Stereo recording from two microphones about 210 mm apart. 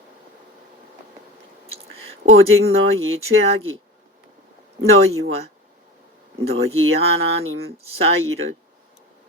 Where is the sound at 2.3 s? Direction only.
75° right (ahead or behind).